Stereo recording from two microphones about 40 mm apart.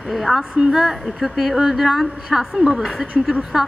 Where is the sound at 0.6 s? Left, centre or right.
Centre.